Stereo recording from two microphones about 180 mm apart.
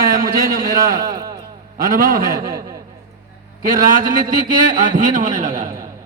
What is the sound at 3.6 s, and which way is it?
A man's voice, 50° right (ahead or behind).